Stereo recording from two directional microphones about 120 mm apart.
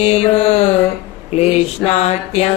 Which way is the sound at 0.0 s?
60° left (ahead or behind).